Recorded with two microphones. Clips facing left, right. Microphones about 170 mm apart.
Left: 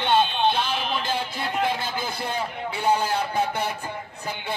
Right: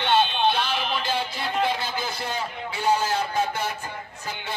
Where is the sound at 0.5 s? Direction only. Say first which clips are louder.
Even; 50° left (ahead or behind).